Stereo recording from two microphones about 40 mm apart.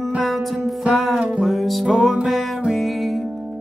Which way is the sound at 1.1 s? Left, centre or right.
Right.